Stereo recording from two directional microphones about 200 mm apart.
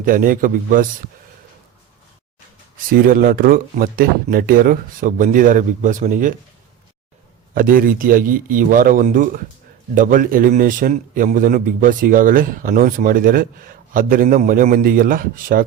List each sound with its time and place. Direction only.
0.0 s a man's voice: 45° right (ahead or behind)
2.9 s a man's voice: 45° right (ahead or behind)
7.5 s a man's voice: 45° right (ahead or behind)